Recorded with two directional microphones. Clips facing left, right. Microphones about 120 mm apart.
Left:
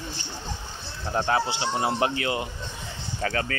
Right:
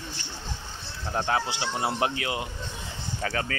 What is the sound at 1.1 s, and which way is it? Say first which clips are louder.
Honk: left 3 dB; 5° left (ahead or behind).